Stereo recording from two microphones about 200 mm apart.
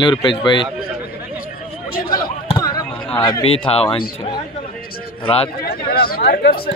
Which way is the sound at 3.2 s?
20° left (ahead or behind).